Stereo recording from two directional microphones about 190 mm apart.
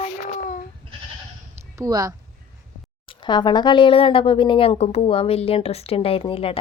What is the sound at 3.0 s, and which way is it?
Speech, 25° left (ahead or behind).